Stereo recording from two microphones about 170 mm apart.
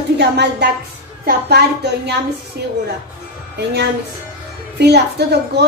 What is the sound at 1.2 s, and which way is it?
A woman's voice, 75° right (ahead or behind).